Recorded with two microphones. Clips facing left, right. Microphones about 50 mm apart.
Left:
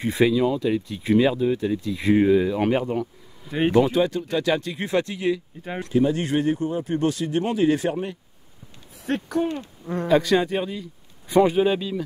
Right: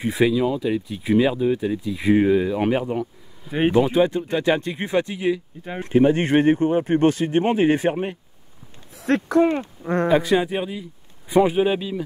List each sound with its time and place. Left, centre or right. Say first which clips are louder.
0.0 s speech: even; centre
5.8 s speech: right 4 dB; right
8.9 s speech: right 6 dB; right
10.0 s speech: even; centre